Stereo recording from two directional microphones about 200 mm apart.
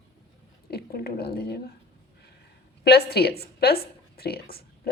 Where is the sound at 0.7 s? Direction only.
50° left (ahead or behind).